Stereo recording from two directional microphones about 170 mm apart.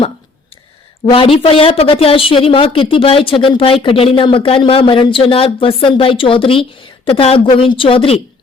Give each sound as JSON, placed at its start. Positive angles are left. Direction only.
{"t": 1.1, "sound": "a woman's voice", "side_deg": 30}